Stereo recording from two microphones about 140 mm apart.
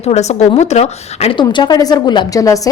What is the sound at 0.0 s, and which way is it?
A woman's voice, 50° left (ahead or behind).